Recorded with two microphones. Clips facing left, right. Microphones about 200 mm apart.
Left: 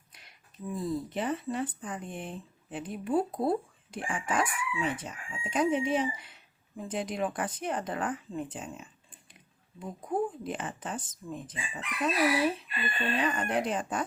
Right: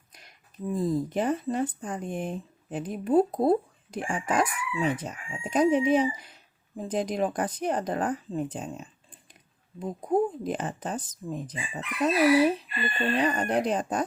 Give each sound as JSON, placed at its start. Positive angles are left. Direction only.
{"t": 0.8, "sound": "speech", "side_deg": -45}